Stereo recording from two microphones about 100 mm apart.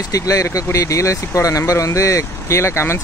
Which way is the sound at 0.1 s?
35° left (ahead or behind).